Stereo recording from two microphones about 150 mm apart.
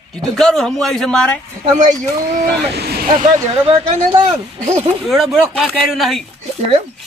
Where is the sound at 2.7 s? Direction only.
90° right.